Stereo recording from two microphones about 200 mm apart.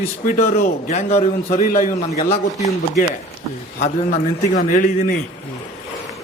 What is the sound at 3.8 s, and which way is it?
A man's voice, 40° left (ahead or behind).